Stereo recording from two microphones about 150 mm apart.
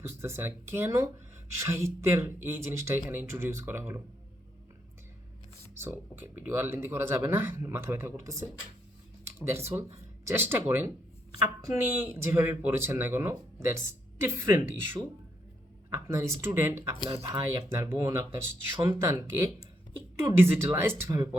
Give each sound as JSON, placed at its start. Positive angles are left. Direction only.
{"t": 0.1, "sound": "speech", "side_deg": -15}
{"t": 5.7, "sound": "speech", "side_deg": -15}
{"t": 17.1, "sound": "speech", "side_deg": -35}
{"t": 17.5, "sound": "speech", "side_deg": -20}